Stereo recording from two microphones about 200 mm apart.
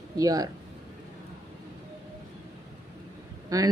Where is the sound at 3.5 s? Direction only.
15° right (ahead or behind).